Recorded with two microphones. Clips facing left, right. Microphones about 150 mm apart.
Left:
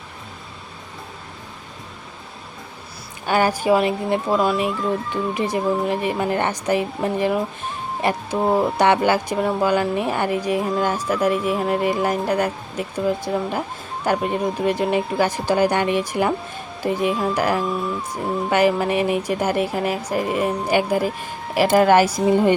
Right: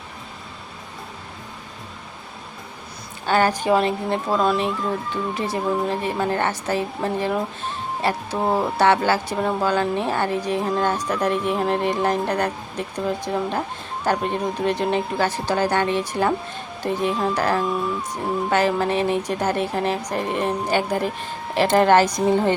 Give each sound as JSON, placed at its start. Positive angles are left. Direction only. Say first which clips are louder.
{"t": 3.2, "sound": "speech", "louder": "left 1 dB", "side_deg": 10}